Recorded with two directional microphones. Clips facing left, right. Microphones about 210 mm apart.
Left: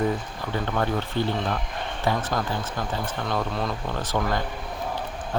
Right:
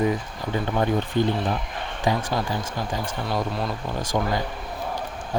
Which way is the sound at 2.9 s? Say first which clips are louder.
Even; 10° right (ahead or behind).